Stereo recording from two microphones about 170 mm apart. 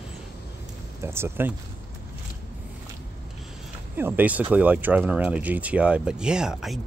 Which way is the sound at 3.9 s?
10° right (ahead or behind).